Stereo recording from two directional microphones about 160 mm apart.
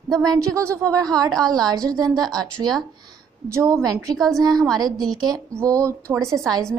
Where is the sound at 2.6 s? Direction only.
10° right (ahead or behind).